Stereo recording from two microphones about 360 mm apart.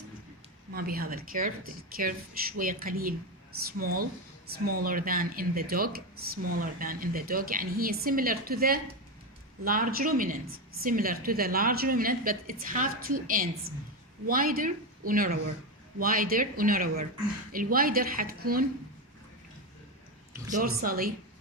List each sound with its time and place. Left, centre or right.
0.7 s a woman's voice: right
20.5 s a woman's voice: right